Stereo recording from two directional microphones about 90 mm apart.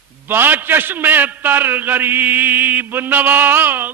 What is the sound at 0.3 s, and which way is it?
A man's voice, 20° right (ahead or behind).